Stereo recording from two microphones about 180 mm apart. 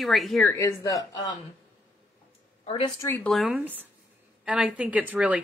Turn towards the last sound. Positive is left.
turn(degrees=-10)  # may be behind; listen again after turning